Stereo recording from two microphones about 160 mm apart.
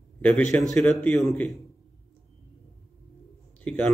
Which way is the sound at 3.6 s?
5° left (ahead or behind).